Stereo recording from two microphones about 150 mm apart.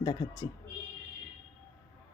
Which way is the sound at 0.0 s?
25° left (ahead or behind).